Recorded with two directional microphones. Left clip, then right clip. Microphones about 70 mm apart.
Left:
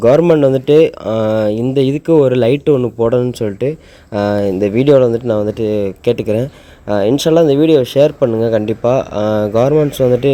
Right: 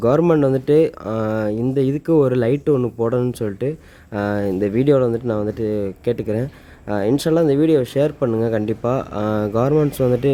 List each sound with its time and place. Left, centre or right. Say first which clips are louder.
0.2 s speech: left 6 dB; centre; by 2.1 s left
2.1 s speech: left 6 dB; centre
8.4 s speech: left 6 dB; centre